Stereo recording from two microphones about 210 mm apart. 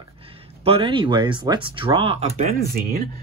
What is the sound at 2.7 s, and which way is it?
Speech, 45° right (ahead or behind).